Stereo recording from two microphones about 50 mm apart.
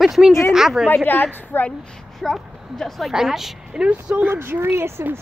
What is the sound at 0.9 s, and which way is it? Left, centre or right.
Speech, left.